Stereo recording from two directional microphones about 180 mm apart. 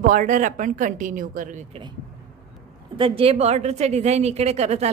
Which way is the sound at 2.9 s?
30° right (ahead or behind).